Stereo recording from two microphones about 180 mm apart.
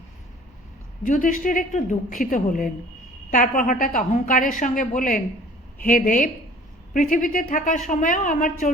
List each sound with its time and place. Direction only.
1.0 s a woman's voice: 45° left (ahead or behind)